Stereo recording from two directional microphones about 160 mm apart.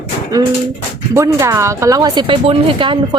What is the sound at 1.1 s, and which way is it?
Speech, 15° right (ahead or behind).